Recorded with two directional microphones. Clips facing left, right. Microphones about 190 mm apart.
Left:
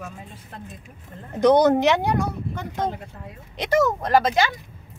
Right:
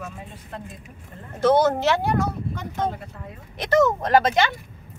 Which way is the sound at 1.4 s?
15° left (ahead or behind).